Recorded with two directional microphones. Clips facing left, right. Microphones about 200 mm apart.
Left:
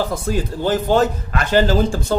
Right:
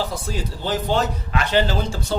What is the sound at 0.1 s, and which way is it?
Speech, 50° left (ahead or behind).